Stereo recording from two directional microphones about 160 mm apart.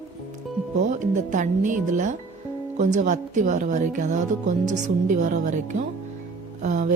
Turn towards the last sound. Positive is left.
turn(degrees=-50)  # may be behind; listen again after turning